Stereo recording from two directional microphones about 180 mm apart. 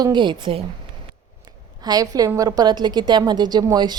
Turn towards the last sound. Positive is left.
turn(degrees=-25)  # may be behind; listen again after turning